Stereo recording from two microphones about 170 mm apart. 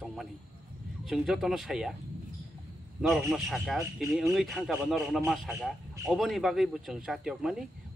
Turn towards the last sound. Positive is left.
turn(degrees=0)  # may be behind; listen again after turning